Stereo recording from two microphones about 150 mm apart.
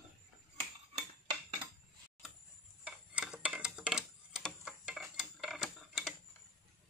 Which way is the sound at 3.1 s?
5° right (ahead or behind).